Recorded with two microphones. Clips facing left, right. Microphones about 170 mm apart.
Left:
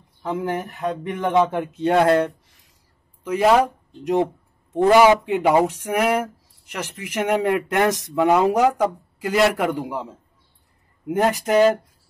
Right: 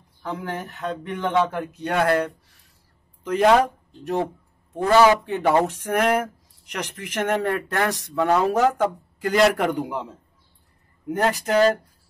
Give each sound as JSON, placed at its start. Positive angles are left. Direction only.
{"t": 0.7, "sound": "speech", "side_deg": 15}
{"t": 3.3, "sound": "speech", "side_deg": 5}
{"t": 4.0, "sound": "speech", "side_deg": 20}
{"t": 11.1, "sound": "speech", "side_deg": 15}